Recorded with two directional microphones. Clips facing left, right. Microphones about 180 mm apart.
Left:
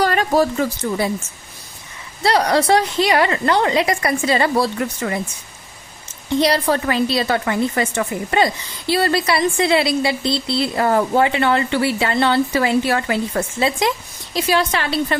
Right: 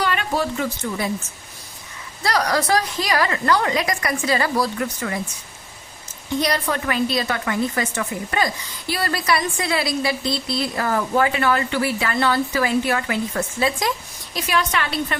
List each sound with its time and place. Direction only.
0.0 s speech: 40° left (ahead or behind)
2.2 s a woman's voice: 25° left (ahead or behind)
6.4 s a woman's voice: 30° left (ahead or behind)